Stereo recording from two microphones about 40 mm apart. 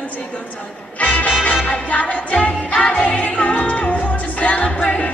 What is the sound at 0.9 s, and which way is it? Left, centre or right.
Music, left.